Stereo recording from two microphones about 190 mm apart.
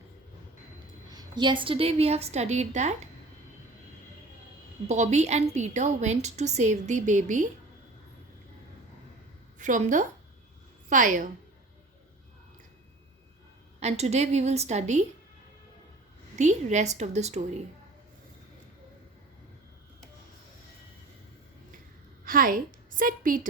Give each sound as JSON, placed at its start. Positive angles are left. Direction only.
{"t": 1.1, "sound": "a woman's voice", "side_deg": -25}
{"t": 4.9, "sound": "a woman's voice", "side_deg": -35}
{"t": 9.6, "sound": "a woman's voice", "side_deg": -45}
{"t": 13.7, "sound": "a woman's voice", "side_deg": -35}
{"t": 16.3, "sound": "a woman's voice", "side_deg": -40}
{"t": 22.2, "sound": "a woman's voice", "side_deg": -45}